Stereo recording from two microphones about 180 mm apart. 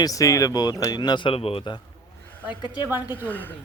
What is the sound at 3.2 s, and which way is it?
Speech, 10° left (ahead or behind).